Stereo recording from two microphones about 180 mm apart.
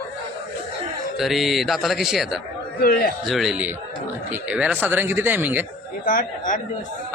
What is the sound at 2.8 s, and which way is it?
Speech, 55° left (ahead or behind).